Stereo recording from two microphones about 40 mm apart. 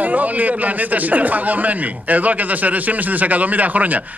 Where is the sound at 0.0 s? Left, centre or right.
Right.